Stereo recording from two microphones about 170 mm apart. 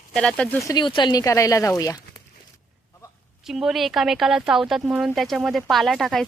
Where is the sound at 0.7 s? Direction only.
25° left (ahead or behind).